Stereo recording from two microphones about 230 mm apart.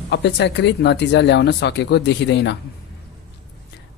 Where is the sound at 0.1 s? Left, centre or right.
Left.